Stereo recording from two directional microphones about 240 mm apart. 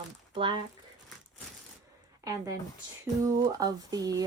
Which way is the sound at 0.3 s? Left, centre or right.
Right.